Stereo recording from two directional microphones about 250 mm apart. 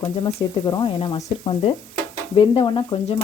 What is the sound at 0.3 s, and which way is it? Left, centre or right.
Stir, centre.